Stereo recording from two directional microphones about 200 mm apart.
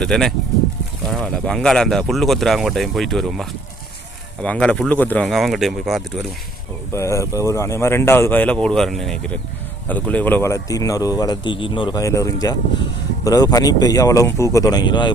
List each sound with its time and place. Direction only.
0.0 s speech: centre (ahead or behind)
4.4 s speech: 5° left (ahead or behind)
6.9 s speech: 15° left (ahead or behind)